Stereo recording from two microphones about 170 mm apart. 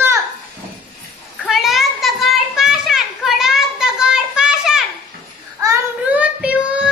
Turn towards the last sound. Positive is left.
turn(degrees=-5)  # may be behind; listen again after turning